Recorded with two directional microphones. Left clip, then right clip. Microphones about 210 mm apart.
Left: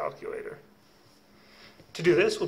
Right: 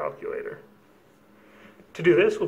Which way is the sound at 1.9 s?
15° left (ahead or behind).